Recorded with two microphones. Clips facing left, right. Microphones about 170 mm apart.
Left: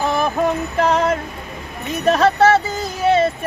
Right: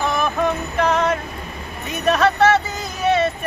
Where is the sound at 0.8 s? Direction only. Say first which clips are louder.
Left 1 dB; 30° left (ahead or behind).